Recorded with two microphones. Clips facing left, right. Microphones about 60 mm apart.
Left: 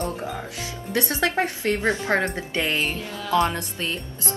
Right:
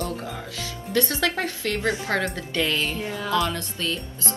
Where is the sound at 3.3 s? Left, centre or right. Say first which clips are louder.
Left 4 dB; left.